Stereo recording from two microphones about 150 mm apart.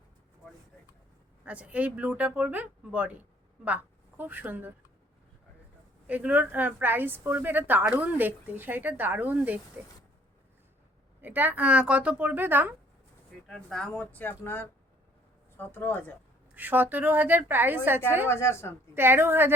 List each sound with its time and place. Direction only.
1.5 s a woman's voice: 10° right (ahead or behind)
6.1 s a woman's voice: 10° right (ahead or behind)
11.2 s a woman's voice: 10° right (ahead or behind)
13.5 s speech: 5° left (ahead or behind)
16.6 s a woman's voice: 10° right (ahead or behind)
18.3 s speech: 15° left (ahead or behind)
18.9 s a woman's voice: 15° right (ahead or behind)